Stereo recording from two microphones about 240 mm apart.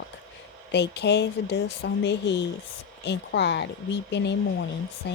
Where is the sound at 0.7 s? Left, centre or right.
Left.